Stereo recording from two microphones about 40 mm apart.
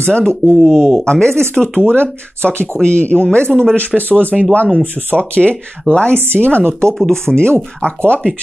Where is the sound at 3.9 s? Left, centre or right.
Centre.